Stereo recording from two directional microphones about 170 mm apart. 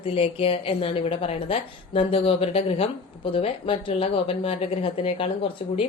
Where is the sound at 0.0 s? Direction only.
35° left (ahead or behind).